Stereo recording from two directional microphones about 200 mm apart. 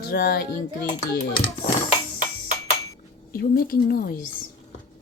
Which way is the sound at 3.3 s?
50° left (ahead or behind).